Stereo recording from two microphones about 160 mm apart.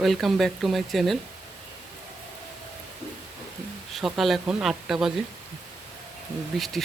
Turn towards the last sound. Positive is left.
turn(degrees=0)  # may be behind; listen again after turning